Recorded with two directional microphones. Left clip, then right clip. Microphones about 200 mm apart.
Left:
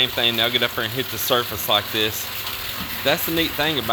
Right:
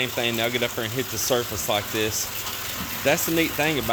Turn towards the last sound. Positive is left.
turn(degrees=-20)  # may be behind; listen again after turning